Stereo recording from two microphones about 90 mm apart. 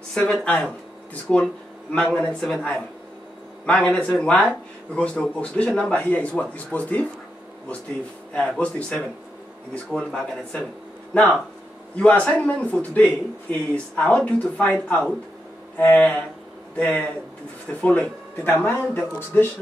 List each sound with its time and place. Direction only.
0.1 s speech: 10° left (ahead or behind)
8.3 s speech: 15° left (ahead or behind)